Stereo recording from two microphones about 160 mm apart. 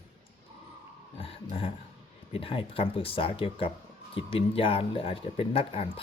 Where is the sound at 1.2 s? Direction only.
35° left (ahead or behind).